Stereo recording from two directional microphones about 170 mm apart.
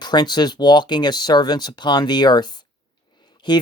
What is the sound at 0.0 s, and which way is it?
Speech, 25° left (ahead or behind).